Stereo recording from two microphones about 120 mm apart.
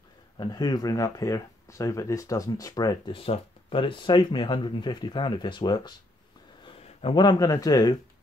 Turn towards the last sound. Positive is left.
turn(degrees=30)  # may be behind; listen again after turning